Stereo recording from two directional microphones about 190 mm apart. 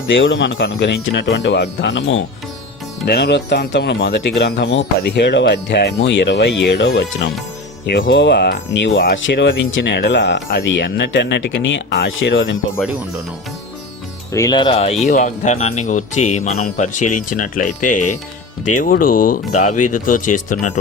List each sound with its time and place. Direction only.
0.1 s speech: 85° left
3.1 s speech: 60° left (ahead or behind)
9.1 s speech: 75° left (ahead or behind)
14.3 s speech: 20° left (ahead or behind); by 20.7 s 45° left (ahead or behind)